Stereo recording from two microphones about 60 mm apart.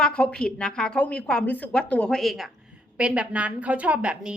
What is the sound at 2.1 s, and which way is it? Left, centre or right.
Speech, centre.